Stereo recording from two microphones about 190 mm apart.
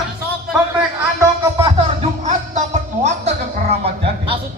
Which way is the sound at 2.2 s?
40° right (ahead or behind).